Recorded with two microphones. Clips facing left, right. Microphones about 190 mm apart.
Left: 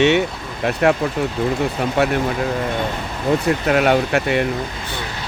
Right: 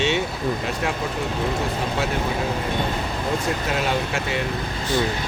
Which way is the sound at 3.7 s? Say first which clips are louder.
Left 10 dB; 60° left (ahead or behind).